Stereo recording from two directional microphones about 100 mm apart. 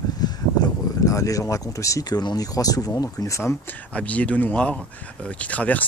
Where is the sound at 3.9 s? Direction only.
15° left (ahead or behind).